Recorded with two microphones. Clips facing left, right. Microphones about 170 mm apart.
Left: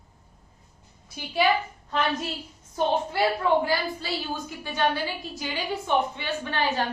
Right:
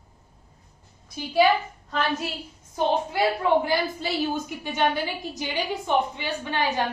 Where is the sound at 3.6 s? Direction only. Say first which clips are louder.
Right 2 dB; 20° right (ahead or behind).